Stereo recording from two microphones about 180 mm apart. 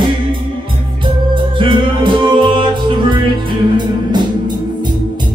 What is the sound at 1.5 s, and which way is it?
Music, 30° right (ahead or behind).